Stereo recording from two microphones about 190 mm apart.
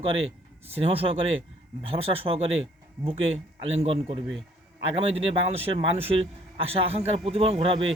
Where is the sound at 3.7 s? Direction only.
30° right (ahead or behind).